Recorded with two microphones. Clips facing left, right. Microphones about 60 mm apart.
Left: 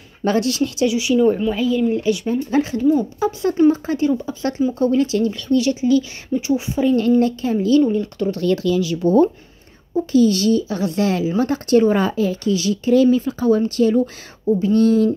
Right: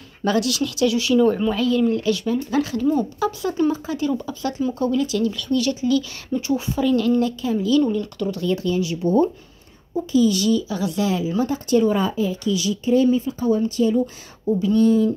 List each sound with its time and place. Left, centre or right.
0.2 s speech: left
0.9 s speech: centre
2.8 s speech: centre
3.7 s speech: left
7.9 s speech: left
8.4 s speech: left
10.1 s speech: left
12.8 s speech: left